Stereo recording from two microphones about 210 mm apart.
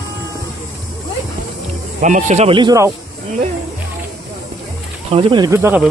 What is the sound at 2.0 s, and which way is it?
Speech, 35° right (ahead or behind).